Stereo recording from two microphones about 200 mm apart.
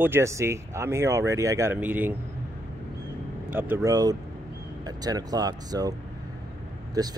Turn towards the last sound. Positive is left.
turn(degrees=-20)  # may be behind; listen again after turning